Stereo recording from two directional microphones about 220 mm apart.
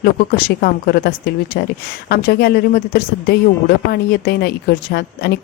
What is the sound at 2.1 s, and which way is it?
Speech, 45° left (ahead or behind).